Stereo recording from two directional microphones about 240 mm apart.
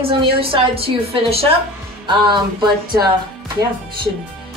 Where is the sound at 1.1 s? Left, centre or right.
Right.